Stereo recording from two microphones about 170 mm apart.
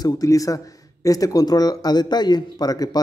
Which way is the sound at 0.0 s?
20° left (ahead or behind).